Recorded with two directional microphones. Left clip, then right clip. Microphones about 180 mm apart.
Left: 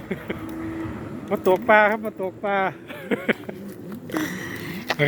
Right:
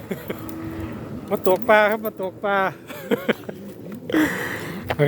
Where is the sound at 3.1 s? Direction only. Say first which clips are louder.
Right 2 dB; 20° right (ahead or behind).